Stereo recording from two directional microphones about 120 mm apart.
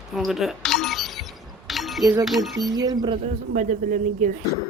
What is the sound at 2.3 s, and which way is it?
Speech, centre (ahead or behind).